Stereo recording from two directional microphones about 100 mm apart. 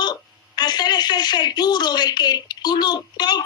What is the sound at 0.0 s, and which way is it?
A woman's voice, 45° left (ahead or behind).